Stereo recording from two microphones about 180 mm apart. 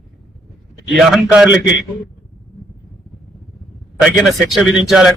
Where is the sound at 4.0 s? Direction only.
Centre (ahead or behind).